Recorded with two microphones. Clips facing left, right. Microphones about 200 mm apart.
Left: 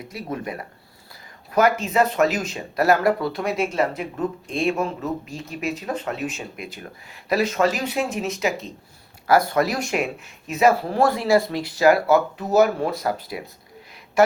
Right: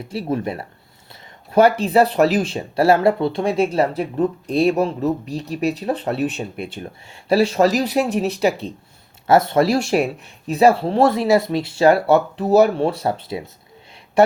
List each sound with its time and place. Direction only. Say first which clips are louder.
0.1 s speech: right 7 dB; 30° right (ahead or behind)